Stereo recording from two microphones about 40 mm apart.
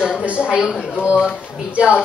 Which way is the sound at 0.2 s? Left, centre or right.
Right.